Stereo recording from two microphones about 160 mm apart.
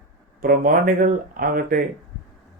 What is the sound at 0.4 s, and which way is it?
Speech, 60° right (ahead or behind).